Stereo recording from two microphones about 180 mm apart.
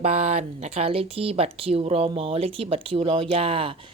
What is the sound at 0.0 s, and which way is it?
Speech, 40° right (ahead or behind).